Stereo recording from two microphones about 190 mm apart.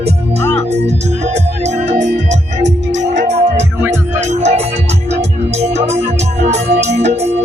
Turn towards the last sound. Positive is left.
turn(degrees=-35)  # may be behind; listen again after turning